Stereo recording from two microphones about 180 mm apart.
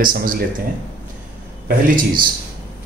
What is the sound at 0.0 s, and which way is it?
Speech, 55° right (ahead or behind).